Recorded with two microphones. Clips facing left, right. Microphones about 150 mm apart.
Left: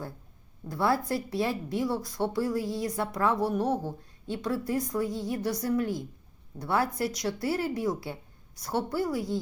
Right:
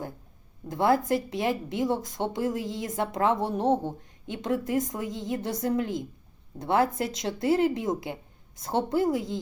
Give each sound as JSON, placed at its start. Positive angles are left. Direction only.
{"t": 0.7, "sound": "speech", "side_deg": -20}